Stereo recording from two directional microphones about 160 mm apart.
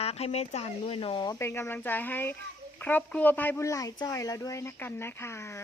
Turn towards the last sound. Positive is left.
turn(degrees=15)  # may be behind; listen again after turning